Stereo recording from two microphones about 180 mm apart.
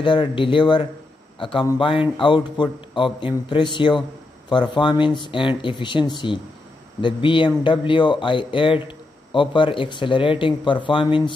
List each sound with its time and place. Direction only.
0.0 s speech: 25° left (ahead or behind)